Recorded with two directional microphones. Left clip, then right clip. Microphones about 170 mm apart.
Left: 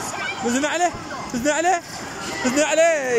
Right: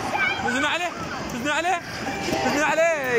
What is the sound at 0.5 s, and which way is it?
Speech, 40° left (ahead or behind).